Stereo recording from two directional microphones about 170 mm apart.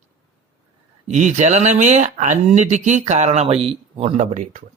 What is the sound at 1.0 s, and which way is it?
Speech, 45° right (ahead or behind).